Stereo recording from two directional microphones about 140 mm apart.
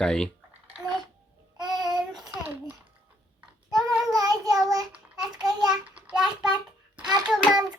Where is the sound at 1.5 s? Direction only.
5° right (ahead or behind).